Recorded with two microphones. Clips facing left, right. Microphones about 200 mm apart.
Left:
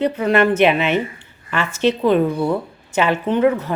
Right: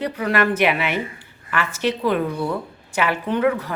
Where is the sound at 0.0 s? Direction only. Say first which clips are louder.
Left 5 dB; 25° left (ahead or behind).